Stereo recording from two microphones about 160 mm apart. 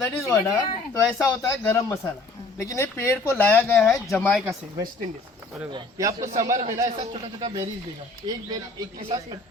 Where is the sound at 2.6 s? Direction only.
20° left (ahead or behind).